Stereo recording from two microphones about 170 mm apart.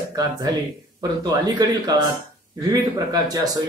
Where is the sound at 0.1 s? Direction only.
20° right (ahead or behind).